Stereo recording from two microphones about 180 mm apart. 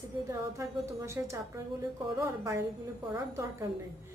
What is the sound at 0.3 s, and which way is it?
A woman's voice, 15° right (ahead or behind).